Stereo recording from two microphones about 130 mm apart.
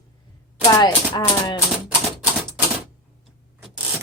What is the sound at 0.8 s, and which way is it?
Speech, 35° left (ahead or behind).